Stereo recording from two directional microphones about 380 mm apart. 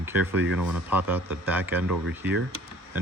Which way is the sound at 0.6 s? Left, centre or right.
Right.